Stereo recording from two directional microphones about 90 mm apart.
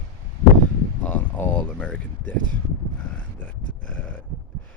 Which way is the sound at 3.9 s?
15° left (ahead or behind).